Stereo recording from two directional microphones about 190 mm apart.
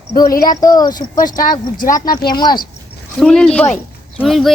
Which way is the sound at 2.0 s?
50° left (ahead or behind).